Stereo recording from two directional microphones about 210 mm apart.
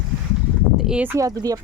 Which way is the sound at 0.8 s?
5° right (ahead or behind).